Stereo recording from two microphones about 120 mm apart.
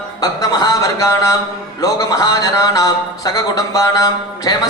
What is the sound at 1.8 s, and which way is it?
Speech, 30° left (ahead or behind).